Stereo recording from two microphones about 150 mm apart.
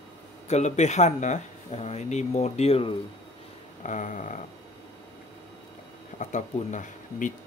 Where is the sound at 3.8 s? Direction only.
55° left (ahead or behind).